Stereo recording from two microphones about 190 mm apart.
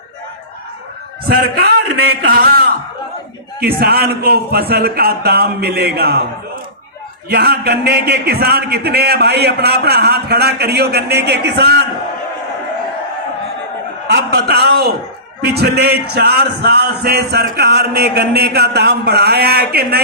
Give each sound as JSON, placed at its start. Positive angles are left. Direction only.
{"t": 1.3, "sound": "speech", "side_deg": -55}
{"t": 7.3, "sound": "speech", "side_deg": -55}
{"t": 14.1, "sound": "speech", "side_deg": -60}